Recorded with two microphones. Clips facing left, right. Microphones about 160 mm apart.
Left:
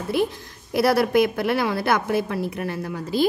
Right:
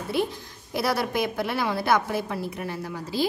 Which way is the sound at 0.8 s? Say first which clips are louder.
Left 7 dB; 60° left (ahead or behind).